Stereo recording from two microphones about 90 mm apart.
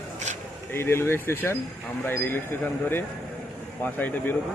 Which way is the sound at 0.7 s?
25° left (ahead or behind).